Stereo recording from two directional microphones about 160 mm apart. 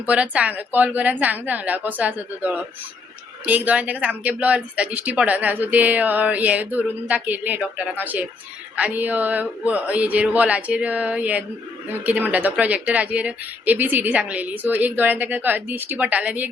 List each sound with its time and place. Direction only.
0.0 s speech: 10° right (ahead or behind)